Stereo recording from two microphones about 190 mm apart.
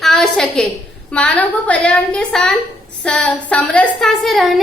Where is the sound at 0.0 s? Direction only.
5° left (ahead or behind).